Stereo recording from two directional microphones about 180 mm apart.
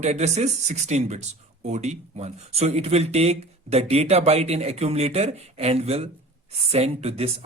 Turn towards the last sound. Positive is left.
turn(degrees=-35)  # may be behind; listen again after turning